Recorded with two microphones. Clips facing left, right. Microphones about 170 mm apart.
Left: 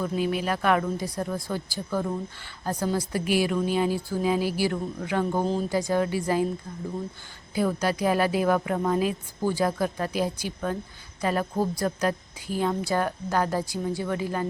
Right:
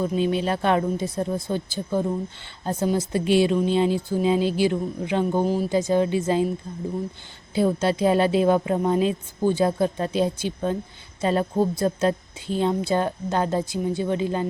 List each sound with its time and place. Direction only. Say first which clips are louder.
0.0 s a woman's voice: right 4 dB; 25° right (ahead or behind)
7.5 s a woman's voice: right 4 dB; 25° right (ahead or behind)